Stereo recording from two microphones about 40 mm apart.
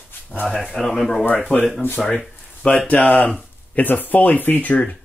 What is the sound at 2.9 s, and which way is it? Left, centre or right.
Speech, left.